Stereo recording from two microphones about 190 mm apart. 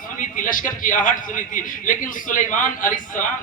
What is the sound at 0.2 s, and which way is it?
A man's voice, 45° left (ahead or behind).